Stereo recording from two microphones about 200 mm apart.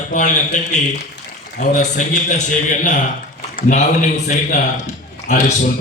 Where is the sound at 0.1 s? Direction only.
40° left (ahead or behind).